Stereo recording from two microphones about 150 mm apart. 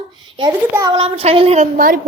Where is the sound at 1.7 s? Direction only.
65° right (ahead or behind).